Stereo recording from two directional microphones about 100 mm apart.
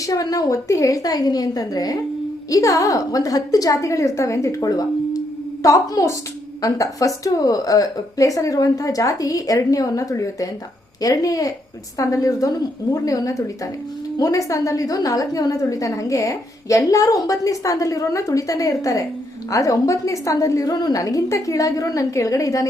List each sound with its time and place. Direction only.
0.0 s a woman's voice: 40° left (ahead or behind)